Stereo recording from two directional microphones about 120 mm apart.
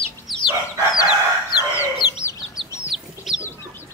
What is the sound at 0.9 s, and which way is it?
Chicken, 30° left (ahead or behind).